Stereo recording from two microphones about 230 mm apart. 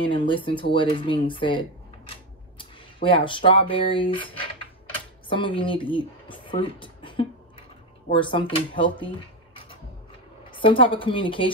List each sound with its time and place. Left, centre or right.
0.0 s speech: left
10.5 s speech: left